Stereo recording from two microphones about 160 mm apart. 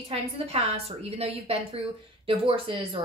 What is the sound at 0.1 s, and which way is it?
A woman's voice, 40° right (ahead or behind).